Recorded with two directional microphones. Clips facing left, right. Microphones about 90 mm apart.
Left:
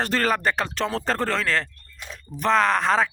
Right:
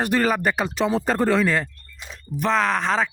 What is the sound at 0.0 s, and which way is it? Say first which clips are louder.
Speech: right 2 dB; 10° right (ahead or behind).